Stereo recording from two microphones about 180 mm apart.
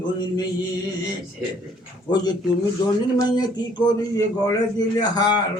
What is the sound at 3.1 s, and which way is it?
A man's voice, 25° left (ahead or behind).